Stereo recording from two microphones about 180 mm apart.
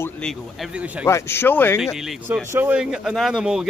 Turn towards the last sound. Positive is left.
turn(degrees=-5)  # may be behind; listen again after turning